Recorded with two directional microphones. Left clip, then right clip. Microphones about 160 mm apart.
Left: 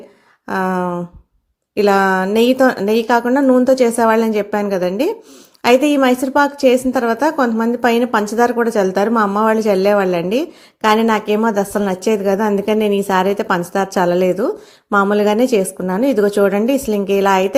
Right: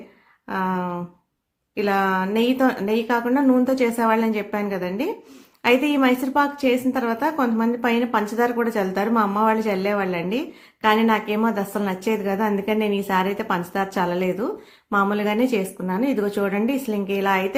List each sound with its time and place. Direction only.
0.4 s a woman's voice: 35° left (ahead or behind)